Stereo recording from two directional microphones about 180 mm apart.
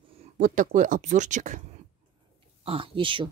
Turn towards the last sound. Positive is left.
turn(degrees=-30)  # may be behind; listen again after turning